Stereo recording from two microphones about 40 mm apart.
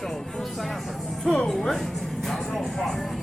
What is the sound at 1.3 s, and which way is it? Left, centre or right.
Music, centre.